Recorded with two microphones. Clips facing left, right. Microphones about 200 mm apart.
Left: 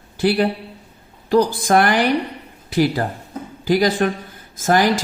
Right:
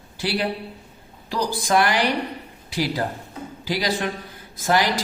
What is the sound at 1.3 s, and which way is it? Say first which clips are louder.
Speech: left 7 dB; 50° left (ahead or behind).